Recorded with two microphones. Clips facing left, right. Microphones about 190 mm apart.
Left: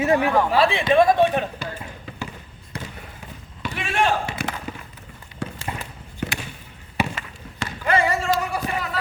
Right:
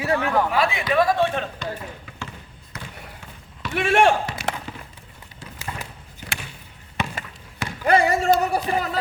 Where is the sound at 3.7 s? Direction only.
65° right (ahead or behind).